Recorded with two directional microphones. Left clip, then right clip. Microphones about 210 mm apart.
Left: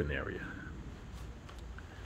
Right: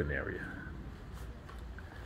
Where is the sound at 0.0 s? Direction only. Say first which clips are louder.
Right 1 dB; centre (ahead or behind).